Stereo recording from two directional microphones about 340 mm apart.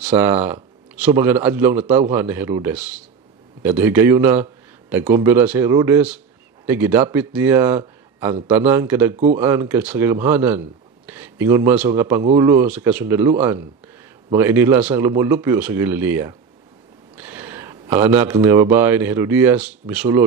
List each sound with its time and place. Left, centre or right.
0.0 s a man's voice: centre
9.1 s speech: centre
9.4 s a man's voice: centre